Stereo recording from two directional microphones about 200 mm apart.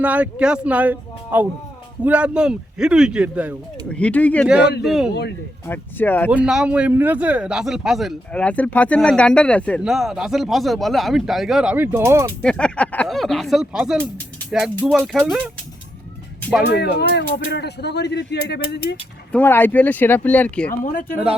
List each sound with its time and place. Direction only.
0.0 s a man's voice: 5° right (ahead or behind)
3.8 s speech: 5° left (ahead or behind)
4.6 s speech: 55° left (ahead or behind)
4.9 s a man's voice: centre (ahead or behind)
5.6 s speech: 10° left (ahead or behind)
6.3 s a man's voice: 5° right (ahead or behind)
12.4 s a man's voice: 5° left (ahead or behind)
16.6 s speech: 55° left (ahead or behind)
19.3 s speech: 10° left (ahead or behind)
20.8 s speech: 45° left (ahead or behind)